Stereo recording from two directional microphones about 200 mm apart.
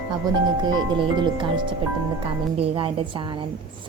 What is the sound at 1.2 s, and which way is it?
Speech, 25° right (ahead or behind).